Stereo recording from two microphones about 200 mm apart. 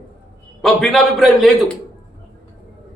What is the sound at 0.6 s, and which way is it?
A man's voice, centre (ahead or behind).